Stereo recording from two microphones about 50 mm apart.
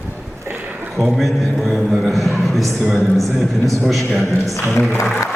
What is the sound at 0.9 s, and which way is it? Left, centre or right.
Speech, centre.